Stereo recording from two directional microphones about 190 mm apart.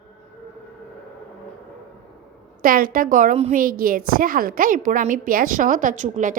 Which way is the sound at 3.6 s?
50° right (ahead or behind).